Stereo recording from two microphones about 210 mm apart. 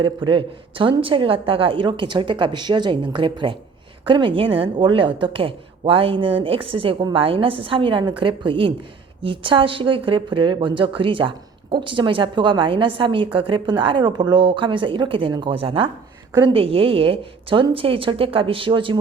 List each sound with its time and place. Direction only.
0.3 s speech: 25° right (ahead or behind)